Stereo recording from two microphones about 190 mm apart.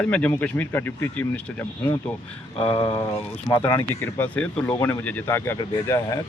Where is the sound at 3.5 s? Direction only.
15° left (ahead or behind).